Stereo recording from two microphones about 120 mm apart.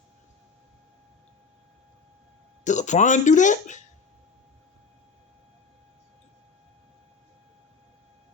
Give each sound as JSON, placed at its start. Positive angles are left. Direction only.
{"t": 2.6, "sound": "speech", "side_deg": 85}